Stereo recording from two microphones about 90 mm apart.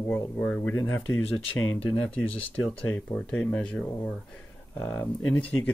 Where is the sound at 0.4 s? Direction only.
10° left (ahead or behind).